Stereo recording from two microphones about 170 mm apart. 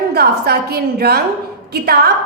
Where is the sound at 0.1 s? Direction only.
70° right (ahead or behind).